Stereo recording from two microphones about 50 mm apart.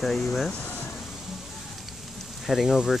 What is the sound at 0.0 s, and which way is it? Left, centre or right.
Speech, centre.